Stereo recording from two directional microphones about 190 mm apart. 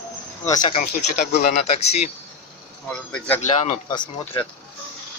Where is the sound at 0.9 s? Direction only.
45° left (ahead or behind).